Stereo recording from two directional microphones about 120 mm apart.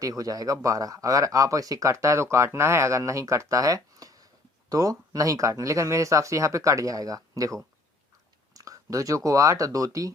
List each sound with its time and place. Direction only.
0.0 s speech: 30° right (ahead or behind)